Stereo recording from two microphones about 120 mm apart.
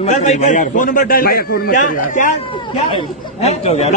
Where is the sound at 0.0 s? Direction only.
75° left (ahead or behind); by 2.3 s 90° left.